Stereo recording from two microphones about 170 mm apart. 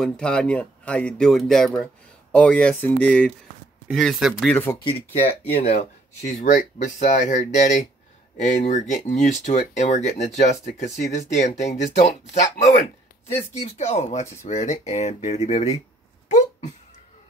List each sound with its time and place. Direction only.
0.0 s speech: 5° left (ahead or behind)
4.5 s speech: 10° left (ahead or behind)
4.8 s speech: 35° left (ahead or behind)
6.2 s speech: 50° left (ahead or behind)